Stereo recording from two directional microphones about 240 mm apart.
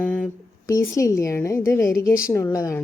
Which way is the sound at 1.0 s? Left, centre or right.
Centre.